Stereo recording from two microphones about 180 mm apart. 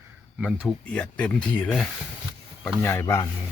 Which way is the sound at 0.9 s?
5° left (ahead or behind).